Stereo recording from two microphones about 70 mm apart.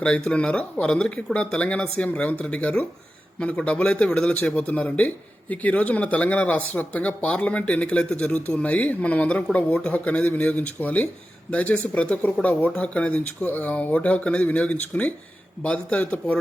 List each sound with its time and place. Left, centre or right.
0.0 s a man's voice: centre